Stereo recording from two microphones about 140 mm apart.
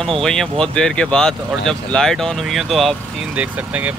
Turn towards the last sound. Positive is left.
turn(degrees=-10)  # may be behind; listen again after turning